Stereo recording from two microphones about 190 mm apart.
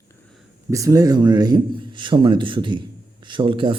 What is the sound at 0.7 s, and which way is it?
A man's voice, 15° right (ahead or behind).